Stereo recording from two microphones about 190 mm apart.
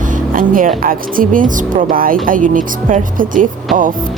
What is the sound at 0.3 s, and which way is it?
Speech, 45° right (ahead or behind).